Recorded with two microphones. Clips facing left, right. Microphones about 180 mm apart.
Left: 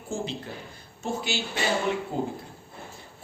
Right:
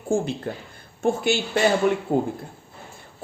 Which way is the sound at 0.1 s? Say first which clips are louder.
Right 9 dB; 50° right (ahead or behind).